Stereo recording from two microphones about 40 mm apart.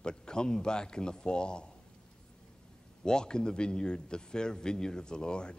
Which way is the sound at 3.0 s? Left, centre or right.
Centre.